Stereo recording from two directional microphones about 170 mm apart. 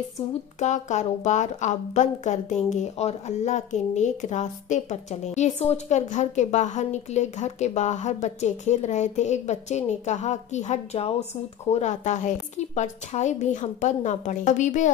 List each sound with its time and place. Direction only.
0.6 s a woman's voice: 45° left (ahead or behind)